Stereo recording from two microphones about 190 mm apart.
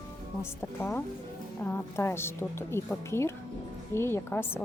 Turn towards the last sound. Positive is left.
turn(degrees=10)  # may be behind; listen again after turning